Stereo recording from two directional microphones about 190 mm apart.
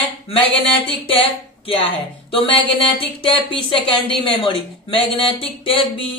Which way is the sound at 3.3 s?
30° left (ahead or behind).